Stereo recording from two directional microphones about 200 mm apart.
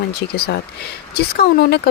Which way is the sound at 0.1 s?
50° left (ahead or behind).